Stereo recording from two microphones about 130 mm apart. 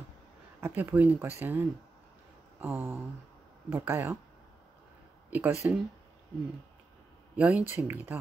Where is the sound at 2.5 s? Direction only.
15° right (ahead or behind).